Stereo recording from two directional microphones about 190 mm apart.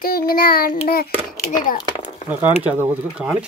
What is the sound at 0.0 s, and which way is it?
Child singing, 50° left (ahead or behind).